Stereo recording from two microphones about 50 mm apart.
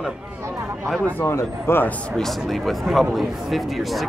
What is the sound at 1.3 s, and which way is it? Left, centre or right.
Speech, left.